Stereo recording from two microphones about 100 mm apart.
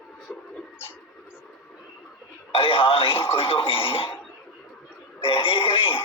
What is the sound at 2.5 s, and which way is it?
Speech, 65° left (ahead or behind).